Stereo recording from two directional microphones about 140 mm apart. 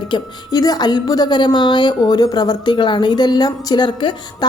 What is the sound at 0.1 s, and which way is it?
A woman's voice, 25° left (ahead or behind).